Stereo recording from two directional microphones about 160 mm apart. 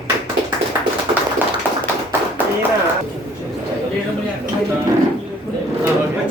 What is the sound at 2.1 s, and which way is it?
Clapping, 10° right (ahead or behind).